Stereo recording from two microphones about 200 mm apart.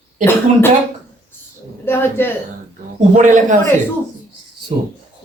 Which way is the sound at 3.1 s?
40° right (ahead or behind).